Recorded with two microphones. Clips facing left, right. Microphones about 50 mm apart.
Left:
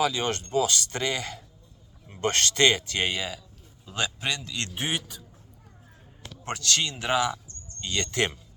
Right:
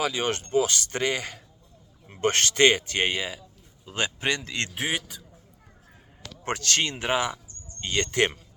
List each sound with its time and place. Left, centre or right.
0.0 s a man's voice: right
4.7 s a man's voice: right
6.4 s a man's voice: right
7.1 s a sound: right
7.9 s a man's voice: right